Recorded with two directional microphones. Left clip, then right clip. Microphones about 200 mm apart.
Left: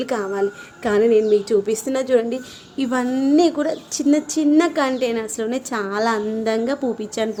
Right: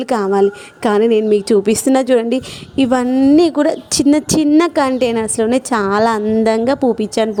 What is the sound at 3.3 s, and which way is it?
A woman's voice, 35° right (ahead or behind).